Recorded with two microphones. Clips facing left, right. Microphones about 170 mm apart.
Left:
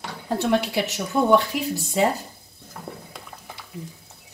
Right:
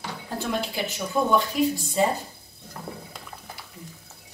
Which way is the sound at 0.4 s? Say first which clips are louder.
Left 6 dB; 70° left (ahead or behind).